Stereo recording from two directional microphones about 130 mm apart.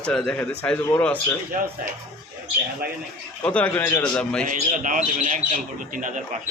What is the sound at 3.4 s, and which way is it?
Speech, 10° left (ahead or behind).